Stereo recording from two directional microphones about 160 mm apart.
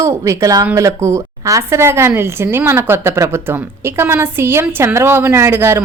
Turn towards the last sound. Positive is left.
turn(degrees=-15)  # may be behind; listen again after turning